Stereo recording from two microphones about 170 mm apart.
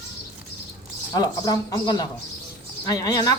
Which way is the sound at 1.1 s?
25° left (ahead or behind).